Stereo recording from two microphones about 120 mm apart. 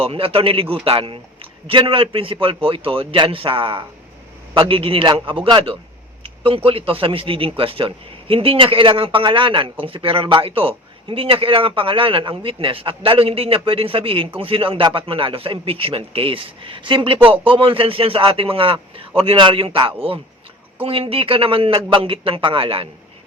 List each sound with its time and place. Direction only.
0.0 s speech: 50° right (ahead or behind)
17.2 s speech: 15° right (ahead or behind)
17.4 s speech: 45° right (ahead or behind)